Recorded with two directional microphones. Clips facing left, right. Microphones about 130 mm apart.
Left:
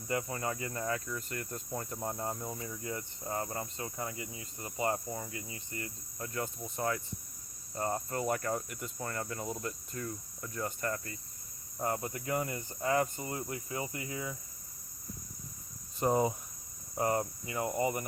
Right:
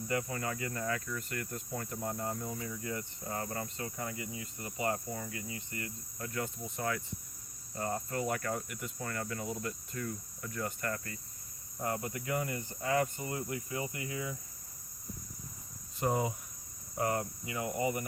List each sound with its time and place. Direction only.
0.1 s cricket: 30° left (ahead or behind)
16.0 s cricket: 35° left (ahead or behind)